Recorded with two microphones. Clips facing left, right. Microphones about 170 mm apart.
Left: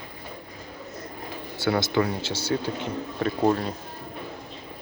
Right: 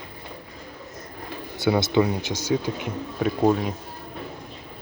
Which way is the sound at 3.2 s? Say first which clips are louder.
Right 2 dB; 5° right (ahead or behind).